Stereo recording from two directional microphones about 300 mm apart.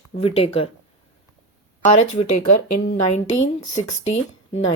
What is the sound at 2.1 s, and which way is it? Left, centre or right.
Speech, left.